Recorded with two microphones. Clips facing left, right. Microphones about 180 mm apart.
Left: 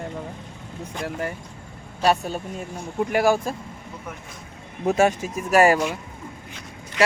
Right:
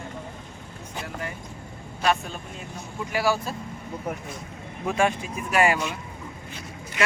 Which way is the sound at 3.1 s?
50° left (ahead or behind).